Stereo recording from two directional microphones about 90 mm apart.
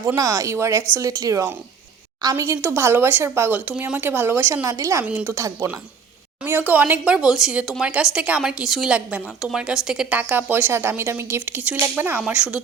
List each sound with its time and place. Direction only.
0.2 s a woman's voice: 40° right (ahead or behind)
2.6 s a woman's voice: 25° right (ahead or behind)
5.0 s a woman's voice: 20° right (ahead or behind)
5.4 s speech: 35° right (ahead or behind)
6.4 s speech: 20° right (ahead or behind)
10.2 s a woman's voice: 20° right (ahead or behind)